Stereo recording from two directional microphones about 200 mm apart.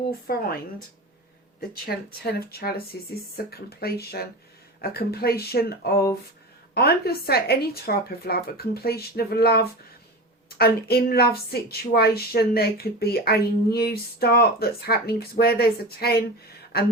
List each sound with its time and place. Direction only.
0.1 s a woman's voice: 50° left (ahead or behind)
2.2 s a woman's voice: 50° left (ahead or behind)